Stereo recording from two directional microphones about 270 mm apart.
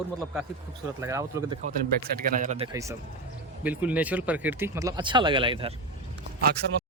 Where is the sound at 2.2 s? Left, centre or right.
Right.